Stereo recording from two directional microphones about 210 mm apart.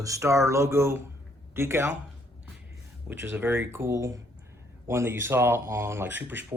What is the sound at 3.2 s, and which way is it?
Speech, 10° right (ahead or behind).